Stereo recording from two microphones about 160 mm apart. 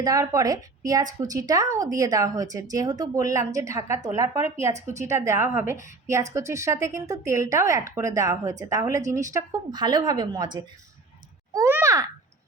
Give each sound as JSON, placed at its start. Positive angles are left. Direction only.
{"t": 0.0, "sound": "a woman's voice", "side_deg": -20}
{"t": 4.7, "sound": "a woman's voice", "side_deg": -45}
{"t": 5.0, "sound": "a woman's voice", "side_deg": -20}